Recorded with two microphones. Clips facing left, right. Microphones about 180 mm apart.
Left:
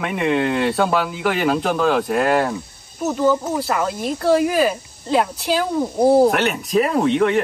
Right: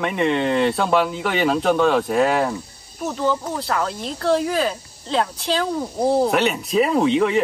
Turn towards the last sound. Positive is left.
turn(degrees=0)  # may be behind; listen again after turning